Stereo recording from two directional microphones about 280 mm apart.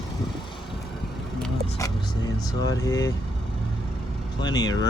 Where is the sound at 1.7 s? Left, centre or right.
Centre.